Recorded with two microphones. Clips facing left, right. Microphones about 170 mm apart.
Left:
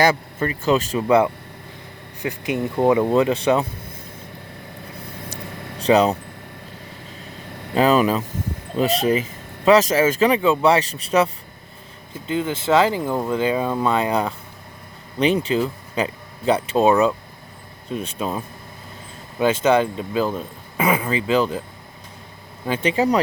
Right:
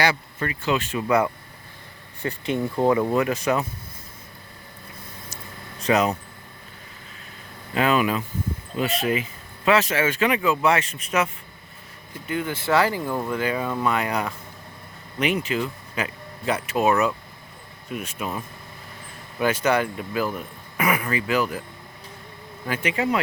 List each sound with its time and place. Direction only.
0.3 s speech: 35° left (ahead or behind)
1.0 s speech: 25° left (ahead or behind)
2.2 s speech: 15° left (ahead or behind); by 3.7 s 30° left (ahead or behind)
5.8 s speech: 35° left (ahead or behind)
7.7 s speech: 35° left (ahead or behind)
12.3 s speech: 25° left (ahead or behind)
22.6 s speech: 30° left (ahead or behind)